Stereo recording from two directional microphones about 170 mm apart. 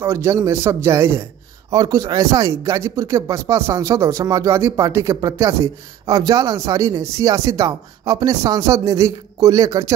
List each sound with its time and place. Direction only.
0.0 s speech: 15° right (ahead or behind)